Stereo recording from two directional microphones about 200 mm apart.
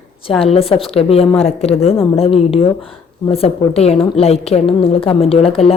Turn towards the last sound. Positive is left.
turn(degrees=30)  # may be behind; listen again after turning